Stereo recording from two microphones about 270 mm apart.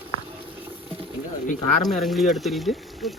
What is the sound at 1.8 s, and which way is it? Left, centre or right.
Speech, centre.